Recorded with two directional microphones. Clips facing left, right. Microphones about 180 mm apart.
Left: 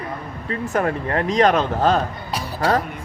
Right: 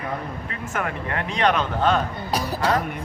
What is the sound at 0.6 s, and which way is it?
A woman's voice, 35° left (ahead or behind).